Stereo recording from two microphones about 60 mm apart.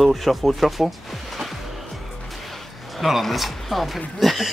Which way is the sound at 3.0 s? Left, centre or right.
Centre.